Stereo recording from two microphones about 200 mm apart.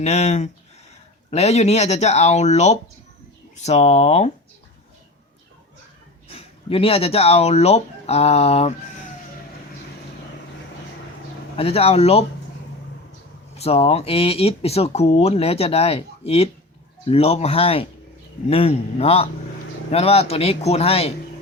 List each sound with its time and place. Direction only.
0.0 s speech: 35° left (ahead or behind)
6.2 s speech: 30° left (ahead or behind)
11.5 s speech: 30° left (ahead or behind)
13.6 s speech: 30° left (ahead or behind)